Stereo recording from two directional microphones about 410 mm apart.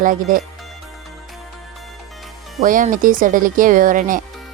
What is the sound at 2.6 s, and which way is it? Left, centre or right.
Speech, centre.